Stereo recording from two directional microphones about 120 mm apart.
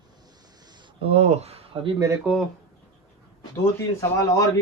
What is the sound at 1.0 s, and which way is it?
Speech, 60° right (ahead or behind).